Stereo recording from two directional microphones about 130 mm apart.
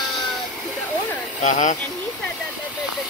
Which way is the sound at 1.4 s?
70° left (ahead or behind).